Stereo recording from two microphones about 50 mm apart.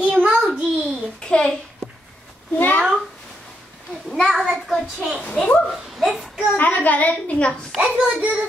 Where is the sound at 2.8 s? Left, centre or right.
Centre.